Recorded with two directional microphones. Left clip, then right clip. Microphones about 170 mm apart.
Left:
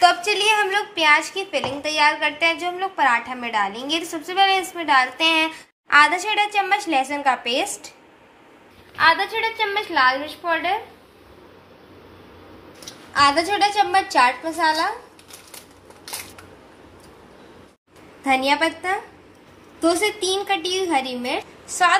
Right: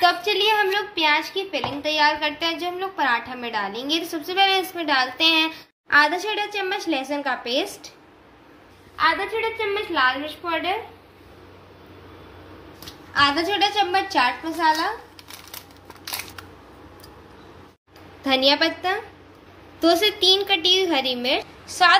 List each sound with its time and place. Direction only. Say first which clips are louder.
0.0 s a woman's voice: left 2 dB; 10° left (ahead or behind)
8.9 s a woman's voice: left 4 dB; 20° left (ahead or behind)
13.1 s a woman's voice: left 2 dB; 15° left (ahead or behind)
18.3 s a woman's voice: even; 15° left (ahead or behind)